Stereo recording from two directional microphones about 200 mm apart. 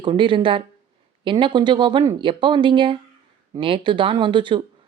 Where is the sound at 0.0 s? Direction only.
25° right (ahead or behind).